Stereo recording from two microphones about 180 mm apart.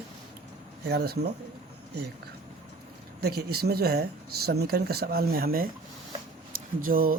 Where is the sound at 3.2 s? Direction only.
60° right (ahead or behind).